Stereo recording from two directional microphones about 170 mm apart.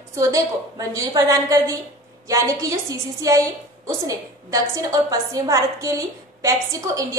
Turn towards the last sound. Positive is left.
turn(degrees=-20)  # may be behind; listen again after turning